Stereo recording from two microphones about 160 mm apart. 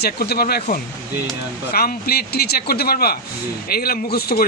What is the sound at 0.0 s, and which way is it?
Speech, 75° left (ahead or behind).